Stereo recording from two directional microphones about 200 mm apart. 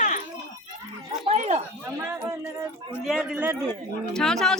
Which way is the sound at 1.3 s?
30° right (ahead or behind).